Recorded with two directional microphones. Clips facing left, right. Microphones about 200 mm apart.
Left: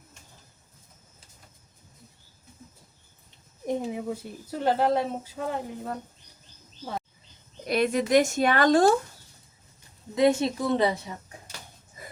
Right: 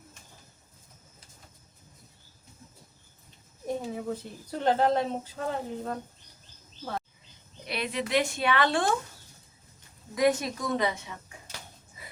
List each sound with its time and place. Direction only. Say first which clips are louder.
3.7 s speech: left 3 dB; 15° left (ahead or behind)
7.7 s speech: left 7 dB; 45° left (ahead or behind)
10.2 s a woman's voice: left 3 dB; 25° left (ahead or behind)
12.0 s dog: left 5 dB; 45° left (ahead or behind)